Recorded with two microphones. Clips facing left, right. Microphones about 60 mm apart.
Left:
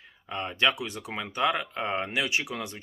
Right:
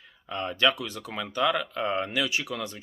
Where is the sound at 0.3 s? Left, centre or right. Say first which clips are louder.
Right 1 dB; left.